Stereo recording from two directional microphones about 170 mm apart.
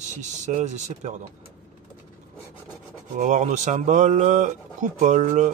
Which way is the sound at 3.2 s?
45° right (ahead or behind).